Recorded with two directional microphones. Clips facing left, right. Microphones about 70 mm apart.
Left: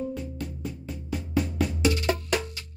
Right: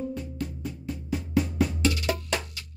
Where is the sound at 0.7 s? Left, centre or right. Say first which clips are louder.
Right 1 dB; centre.